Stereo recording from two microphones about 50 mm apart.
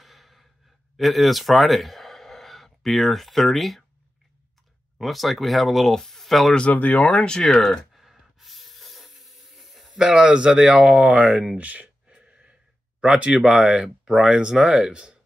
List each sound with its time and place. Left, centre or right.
0.0 s breathing: centre
0.9 s speech: centre
4.9 s speech: centre
6.7 s speech: left
7.2 s speech: centre
8.0 s hiss: centre
10.0 s speech: centre
12.1 s gasp: right
13.0 s speech: centre